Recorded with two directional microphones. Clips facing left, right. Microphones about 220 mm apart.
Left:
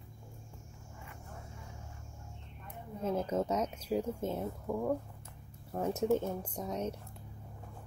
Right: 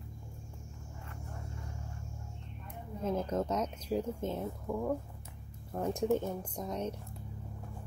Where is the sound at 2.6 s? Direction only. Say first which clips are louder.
Even; 10° left (ahead or behind).